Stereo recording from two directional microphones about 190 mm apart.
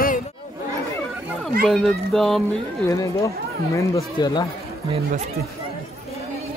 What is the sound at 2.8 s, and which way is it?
Speech, 15° left (ahead or behind).